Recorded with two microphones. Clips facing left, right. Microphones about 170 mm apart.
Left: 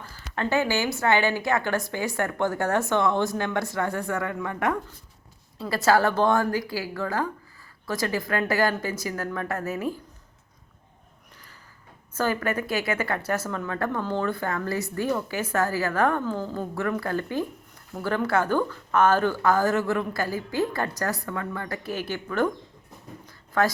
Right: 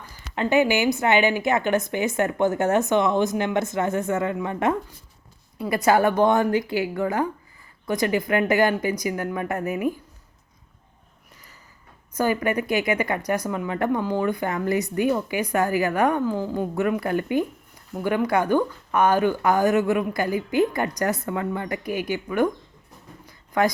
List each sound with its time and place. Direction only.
0.1 s a woman's voice: 15° right (ahead or behind)
12.1 s speech: 15° right (ahead or behind)
23.6 s speech: 15° right (ahead or behind)